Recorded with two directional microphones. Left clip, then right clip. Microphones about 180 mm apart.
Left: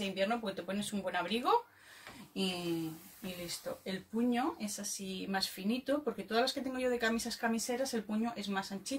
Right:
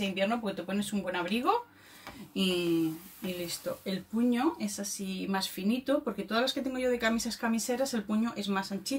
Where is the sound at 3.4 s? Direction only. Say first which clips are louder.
Right 3 dB; 10° left (ahead or behind).